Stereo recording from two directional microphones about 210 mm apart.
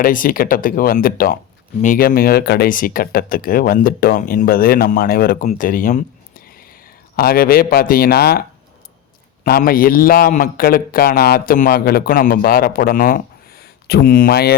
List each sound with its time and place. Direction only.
0.0 s a man's voice: 40° left (ahead or behind)
5.5 s a sound: 40° left (ahead or behind)
7.2 s a man's voice: 45° left (ahead or behind)
9.4 s a man's voice: 45° left (ahead or behind)